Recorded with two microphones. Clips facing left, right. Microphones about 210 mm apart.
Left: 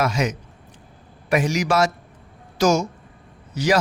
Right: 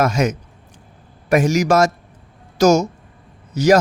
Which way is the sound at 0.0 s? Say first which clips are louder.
Right 5 dB; 45° right (ahead or behind).